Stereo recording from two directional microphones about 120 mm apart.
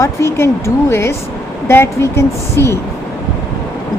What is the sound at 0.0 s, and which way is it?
A woman's voice, 25° left (ahead or behind).